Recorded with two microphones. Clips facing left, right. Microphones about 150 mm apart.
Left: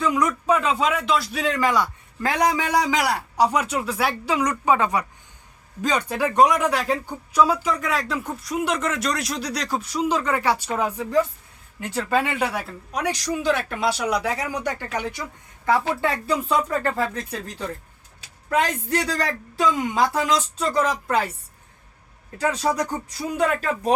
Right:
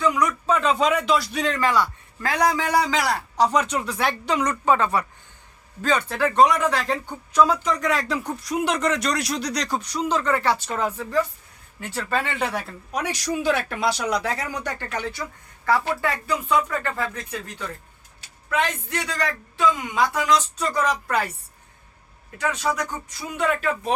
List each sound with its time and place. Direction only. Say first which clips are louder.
0.4 s a man's voice: right 2 dB; 10° left (ahead or behind)
22.4 s a man's voice: left 2 dB; 35° left (ahead or behind)